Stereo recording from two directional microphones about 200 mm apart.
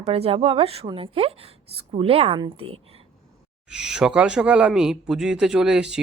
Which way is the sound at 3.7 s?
5° right (ahead or behind).